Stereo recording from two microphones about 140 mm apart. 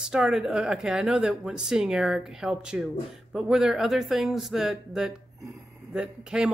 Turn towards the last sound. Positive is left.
turn(degrees=-5)  # may be behind; listen again after turning